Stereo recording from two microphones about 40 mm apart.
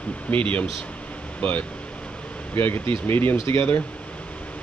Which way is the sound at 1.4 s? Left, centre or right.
Left.